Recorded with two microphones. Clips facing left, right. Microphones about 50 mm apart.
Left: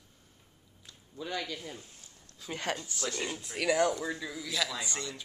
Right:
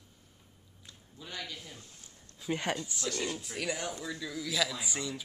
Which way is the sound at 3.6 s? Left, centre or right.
Left.